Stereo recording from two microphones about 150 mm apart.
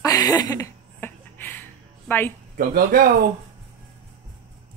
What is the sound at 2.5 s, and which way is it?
Speech, 75° right (ahead or behind).